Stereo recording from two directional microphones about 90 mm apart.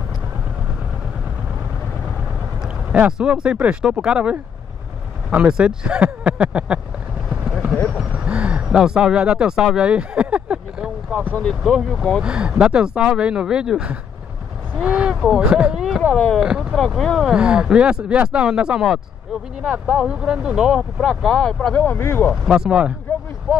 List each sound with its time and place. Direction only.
2.6 s speech: 10° right (ahead or behind)
7.2 s boat: 5° right (ahead or behind)
8.1 s speech: 15° right (ahead or behind)
9.8 s vehicle: 10° right (ahead or behind)
11.4 s speech: 5° right (ahead or behind)
21.8 s speech: 25° left (ahead or behind)
22.3 s speech: 10° right (ahead or behind)